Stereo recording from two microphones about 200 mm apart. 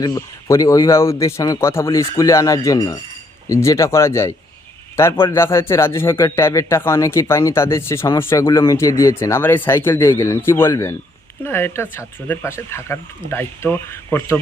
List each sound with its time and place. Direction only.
0.0 s speech: 15° left (ahead or behind)